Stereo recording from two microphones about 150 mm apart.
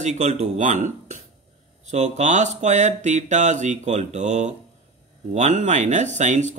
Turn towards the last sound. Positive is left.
turn(degrees=-50)  # may be behind; listen again after turning